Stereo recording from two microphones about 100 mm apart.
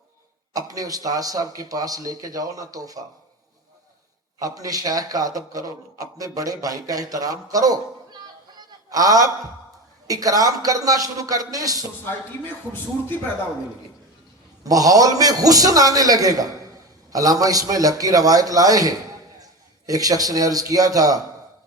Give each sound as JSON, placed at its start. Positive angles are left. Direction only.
{"t": 0.5, "sound": "a man's voice", "side_deg": -35}
{"t": 4.4, "sound": "a man's voice", "side_deg": -35}
{"t": 8.5, "sound": "a sound", "side_deg": -35}
{"t": 10.1, "sound": "a man's voice", "side_deg": -35}
{"t": 14.6, "sound": "a man's voice", "side_deg": -35}